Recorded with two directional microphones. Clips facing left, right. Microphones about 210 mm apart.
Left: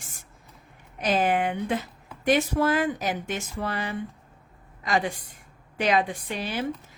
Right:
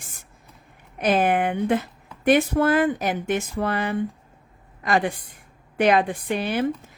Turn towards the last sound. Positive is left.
turn(degrees=-55)  # may be behind; listen again after turning